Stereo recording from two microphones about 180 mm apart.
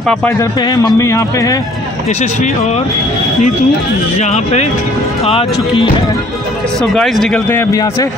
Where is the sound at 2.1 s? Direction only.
40° left (ahead or behind).